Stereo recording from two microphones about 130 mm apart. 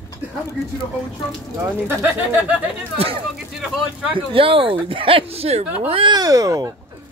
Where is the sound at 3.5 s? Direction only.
5° right (ahead or behind).